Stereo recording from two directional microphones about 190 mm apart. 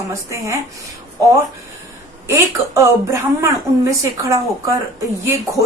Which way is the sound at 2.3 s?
15° right (ahead or behind).